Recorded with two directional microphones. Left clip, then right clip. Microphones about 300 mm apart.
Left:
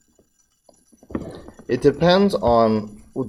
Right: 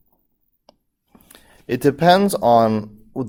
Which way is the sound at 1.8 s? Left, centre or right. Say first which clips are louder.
Right 2 dB; right.